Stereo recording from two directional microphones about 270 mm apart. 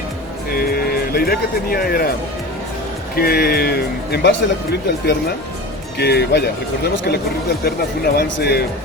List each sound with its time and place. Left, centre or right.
0.5 s speech: left
3.2 s speech: left
7.6 s speech: left